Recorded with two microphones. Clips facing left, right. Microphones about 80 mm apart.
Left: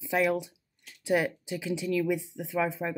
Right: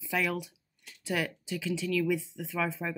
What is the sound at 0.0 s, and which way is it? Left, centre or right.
Speech, left.